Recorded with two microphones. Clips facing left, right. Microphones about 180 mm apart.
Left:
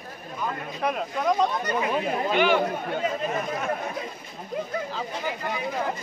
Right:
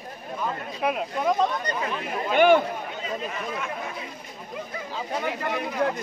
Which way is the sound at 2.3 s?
50° right (ahead or behind).